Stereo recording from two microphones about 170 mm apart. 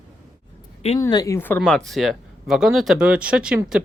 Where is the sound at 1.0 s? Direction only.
20° left (ahead or behind); by 3.6 s 5° right (ahead or behind).